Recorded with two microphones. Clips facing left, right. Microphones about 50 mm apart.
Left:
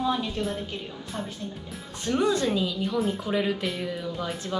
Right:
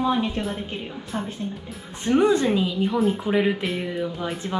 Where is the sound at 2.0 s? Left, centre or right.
Right.